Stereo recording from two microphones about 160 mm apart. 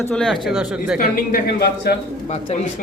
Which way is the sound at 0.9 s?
65° left (ahead or behind).